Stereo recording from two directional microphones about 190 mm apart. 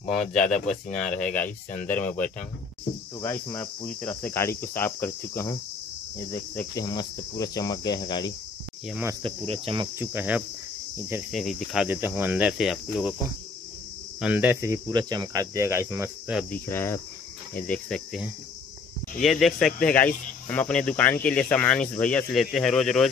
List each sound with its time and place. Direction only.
0.0 s speech: 5° left (ahead or behind)
1.8 s cricket: 10° left (ahead or behind)
6.6 s cricket: 20° left (ahead or behind)
9.2 s cricket: 30° right (ahead or behind)
9.9 s speech: 10° right (ahead or behind)
14.2 s speech: 10° right (ahead or behind)
16.6 s cricket: 15° left (ahead or behind)
17.6 s speech: 5° left (ahead or behind)